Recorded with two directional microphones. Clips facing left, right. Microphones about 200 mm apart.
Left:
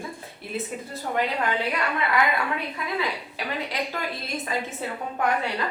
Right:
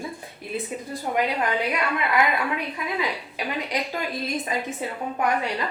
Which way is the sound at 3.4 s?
15° right (ahead or behind).